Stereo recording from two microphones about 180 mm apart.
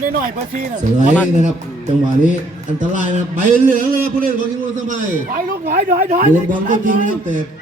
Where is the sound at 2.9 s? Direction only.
45° right (ahead or behind).